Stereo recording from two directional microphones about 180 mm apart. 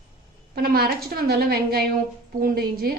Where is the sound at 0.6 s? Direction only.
60° right (ahead or behind).